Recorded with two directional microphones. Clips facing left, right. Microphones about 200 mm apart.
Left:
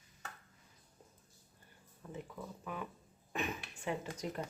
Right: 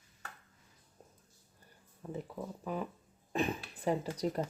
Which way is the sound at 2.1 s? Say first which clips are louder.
Right 5 dB; 35° right (ahead or behind).